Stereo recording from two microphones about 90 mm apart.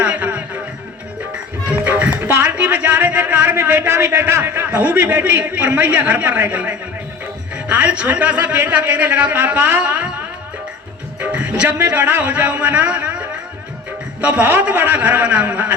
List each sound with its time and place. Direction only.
0.0 s music: 15° right (ahead or behind)
1.7 s music: 20° right (ahead or behind)
2.3 s a man's voice: 30° right (ahead or behind)
11.2 s a man's voice: 15° right (ahead or behind)